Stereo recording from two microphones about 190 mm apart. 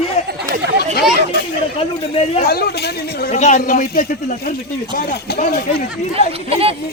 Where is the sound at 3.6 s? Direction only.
50° left (ahead or behind).